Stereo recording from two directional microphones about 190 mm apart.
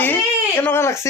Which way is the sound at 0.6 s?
10° left (ahead or behind).